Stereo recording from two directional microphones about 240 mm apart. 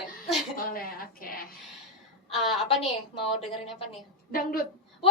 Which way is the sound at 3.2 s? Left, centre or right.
Left.